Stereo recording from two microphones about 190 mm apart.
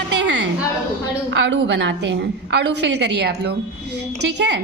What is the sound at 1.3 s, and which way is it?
A woman's voice, 70° right (ahead or behind).